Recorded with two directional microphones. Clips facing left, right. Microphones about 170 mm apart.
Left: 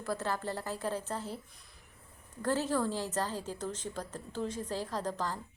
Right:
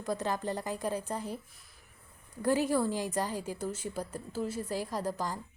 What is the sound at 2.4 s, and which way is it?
A woman's voice, 10° right (ahead or behind).